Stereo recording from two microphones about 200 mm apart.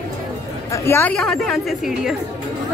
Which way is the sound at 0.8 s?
10° left (ahead or behind).